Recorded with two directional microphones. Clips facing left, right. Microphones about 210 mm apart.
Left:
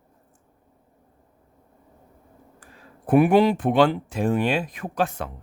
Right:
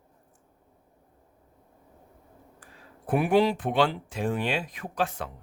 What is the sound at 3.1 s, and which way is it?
Speech, 55° left (ahead or behind).